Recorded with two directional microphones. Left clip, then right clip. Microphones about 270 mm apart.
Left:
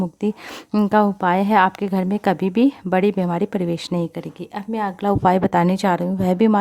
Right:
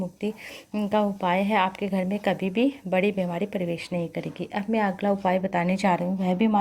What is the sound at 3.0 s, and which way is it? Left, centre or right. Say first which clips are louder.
Speech: left 6 dB; left.